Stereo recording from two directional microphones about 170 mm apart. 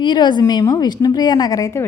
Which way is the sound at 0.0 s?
25° left (ahead or behind).